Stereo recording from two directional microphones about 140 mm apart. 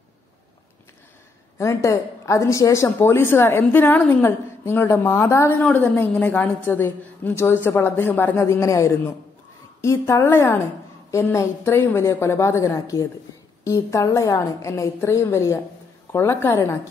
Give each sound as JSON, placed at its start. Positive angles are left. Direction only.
{"t": 1.6, "sound": "a woman's voice", "side_deg": 20}